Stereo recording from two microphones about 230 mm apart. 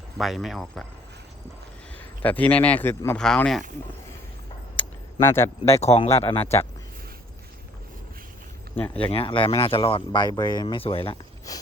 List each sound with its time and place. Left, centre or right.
0.2 s speech: centre
2.2 s speech: centre
5.2 s speech: centre
5.6 s speech: left
8.7 s speech: centre
9.0 s speech: left